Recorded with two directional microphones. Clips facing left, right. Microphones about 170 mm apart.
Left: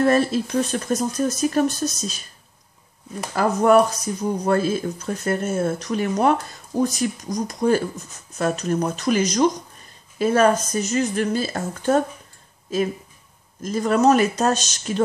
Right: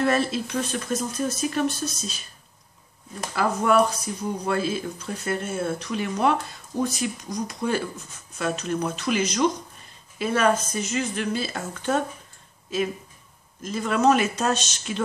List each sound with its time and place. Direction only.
0.0 s speech: 40° left (ahead or behind)
3.3 s speech: 40° left (ahead or behind)
13.6 s speech: 40° left (ahead or behind)